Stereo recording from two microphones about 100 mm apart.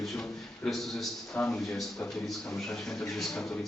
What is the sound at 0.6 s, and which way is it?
Speech, centre (ahead or behind).